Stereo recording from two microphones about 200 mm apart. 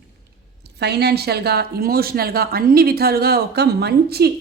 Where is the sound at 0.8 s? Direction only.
55° right (ahead or behind).